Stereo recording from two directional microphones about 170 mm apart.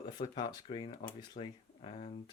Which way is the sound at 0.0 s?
25° left (ahead or behind).